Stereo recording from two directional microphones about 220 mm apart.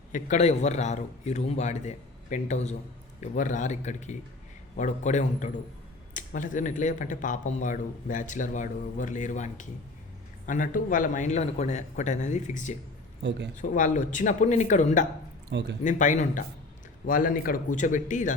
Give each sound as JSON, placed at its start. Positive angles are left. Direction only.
{"t": 0.1, "sound": "speech", "side_deg": 30}